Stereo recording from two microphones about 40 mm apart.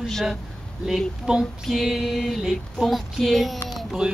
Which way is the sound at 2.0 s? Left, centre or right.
Centre.